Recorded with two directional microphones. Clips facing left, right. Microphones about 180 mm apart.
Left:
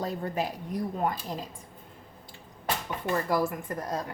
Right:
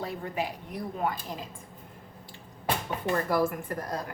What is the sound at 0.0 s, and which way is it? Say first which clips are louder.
Speech: left 2 dB; 40° left (ahead or behind).